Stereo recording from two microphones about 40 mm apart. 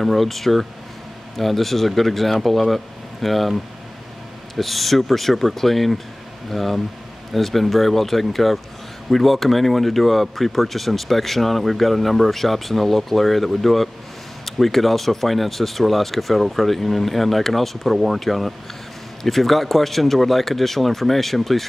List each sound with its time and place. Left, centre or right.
0.0 s speech: centre
4.6 s speech: centre